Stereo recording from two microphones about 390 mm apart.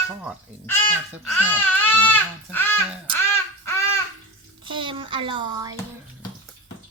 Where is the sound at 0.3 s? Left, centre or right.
Centre.